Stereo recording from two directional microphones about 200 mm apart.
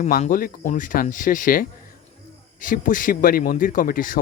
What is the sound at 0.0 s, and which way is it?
Speech, 40° left (ahead or behind).